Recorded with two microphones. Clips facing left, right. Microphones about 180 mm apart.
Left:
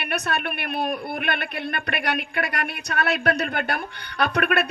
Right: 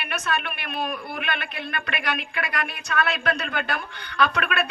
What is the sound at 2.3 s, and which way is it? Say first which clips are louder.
Speech: left 2 dB; 60° left (ahead or behind).